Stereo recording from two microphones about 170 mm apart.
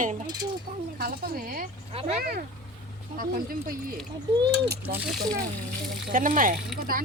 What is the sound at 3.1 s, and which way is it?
Speech, 55° right (ahead or behind).